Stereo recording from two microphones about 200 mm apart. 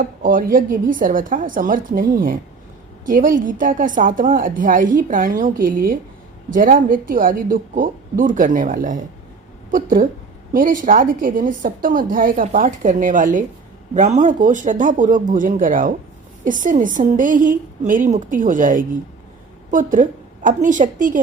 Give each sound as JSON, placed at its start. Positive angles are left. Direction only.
{"t": 0.0, "sound": "a woman's voice", "side_deg": -45}
{"t": 3.1, "sound": "a woman's voice", "side_deg": -40}